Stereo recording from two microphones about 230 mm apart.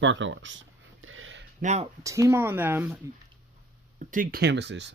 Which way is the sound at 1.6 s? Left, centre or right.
Right.